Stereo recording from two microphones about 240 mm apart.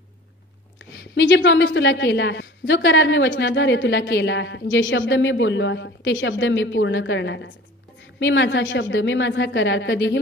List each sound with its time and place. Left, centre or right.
0.7 s a woman's voice: left